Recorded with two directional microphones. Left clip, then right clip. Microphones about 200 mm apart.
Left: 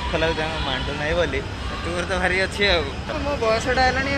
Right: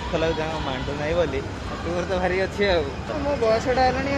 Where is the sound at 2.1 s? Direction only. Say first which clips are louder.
Left 3 dB; 20° right (ahead or behind).